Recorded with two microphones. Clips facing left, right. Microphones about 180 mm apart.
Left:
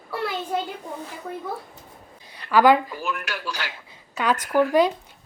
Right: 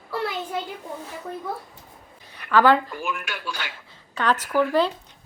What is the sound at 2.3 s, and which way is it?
A woman's voice, 10° left (ahead or behind).